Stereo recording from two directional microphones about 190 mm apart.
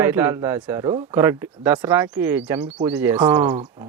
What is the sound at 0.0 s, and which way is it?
Speech, 10° right (ahead or behind).